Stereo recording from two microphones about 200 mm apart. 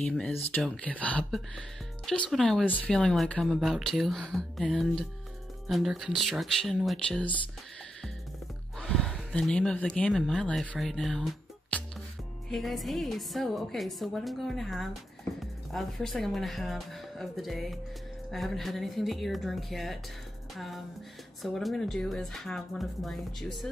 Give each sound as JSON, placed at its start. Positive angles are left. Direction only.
{"t": 0.0, "sound": "speech", "side_deg": 5}
{"t": 8.7, "sound": "speech", "side_deg": 5}